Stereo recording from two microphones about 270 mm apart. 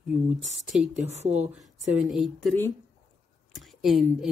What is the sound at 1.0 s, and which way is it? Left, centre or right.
Speech, right.